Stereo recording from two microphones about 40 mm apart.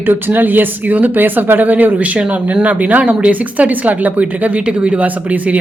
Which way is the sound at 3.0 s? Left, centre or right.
Right.